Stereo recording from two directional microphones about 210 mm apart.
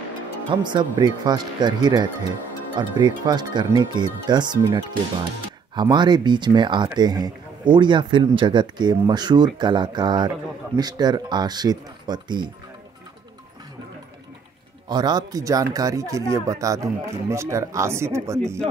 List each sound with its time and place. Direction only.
0.5 s speech: 20° right (ahead or behind)
14.9 s speech: 20° right (ahead or behind)